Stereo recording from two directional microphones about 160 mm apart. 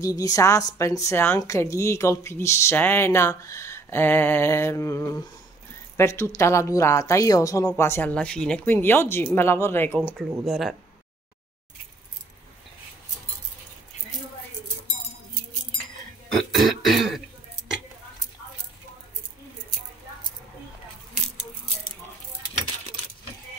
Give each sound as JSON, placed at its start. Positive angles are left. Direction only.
{"t": 0.0, "sound": "a woman's voice", "side_deg": 20}
{"t": 9.9, "sound": "throat clearing", "side_deg": 5}
{"t": 16.3, "sound": "throat clearing", "side_deg": 0}